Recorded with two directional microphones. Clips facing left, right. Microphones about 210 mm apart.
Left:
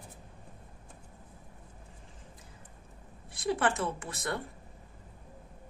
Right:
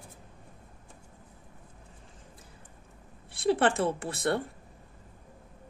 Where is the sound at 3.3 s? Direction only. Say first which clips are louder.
Right 5 dB; 30° right (ahead or behind).